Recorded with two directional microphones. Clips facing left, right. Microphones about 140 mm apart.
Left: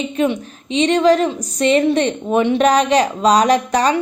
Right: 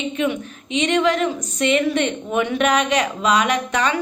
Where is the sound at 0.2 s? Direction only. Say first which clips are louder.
Left 6 dB; 30° left (ahead or behind).